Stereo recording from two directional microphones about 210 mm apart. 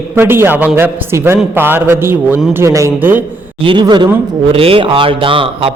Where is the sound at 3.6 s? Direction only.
25° right (ahead or behind).